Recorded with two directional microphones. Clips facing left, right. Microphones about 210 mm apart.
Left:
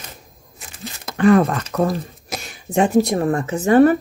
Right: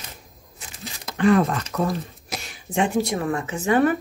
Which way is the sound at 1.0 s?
50° left (ahead or behind).